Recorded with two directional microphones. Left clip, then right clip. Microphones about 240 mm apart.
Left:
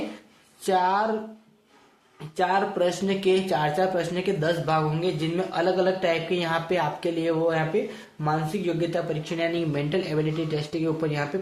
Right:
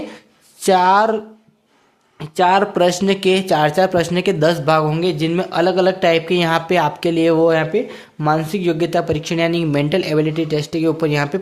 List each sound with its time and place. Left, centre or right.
0.6 s speech: right
2.1 s speech: right